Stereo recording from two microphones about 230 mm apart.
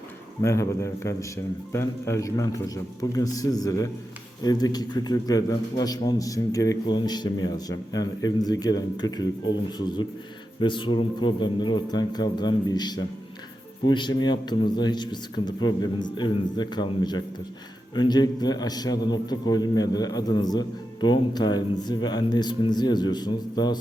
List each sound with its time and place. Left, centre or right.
0.4 s a man's voice: centre